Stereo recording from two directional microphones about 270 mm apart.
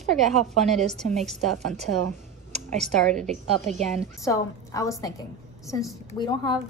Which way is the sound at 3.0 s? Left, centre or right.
Centre.